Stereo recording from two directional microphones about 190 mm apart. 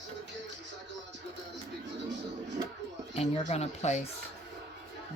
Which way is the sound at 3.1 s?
30° left (ahead or behind).